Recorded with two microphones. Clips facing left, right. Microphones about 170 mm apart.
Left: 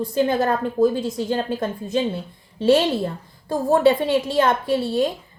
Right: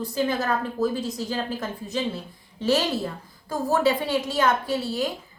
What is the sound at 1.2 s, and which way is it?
A woman's voice, 25° left (ahead or behind).